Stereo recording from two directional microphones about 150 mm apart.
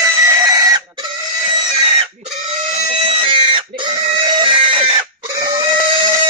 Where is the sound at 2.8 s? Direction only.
40° right (ahead or behind).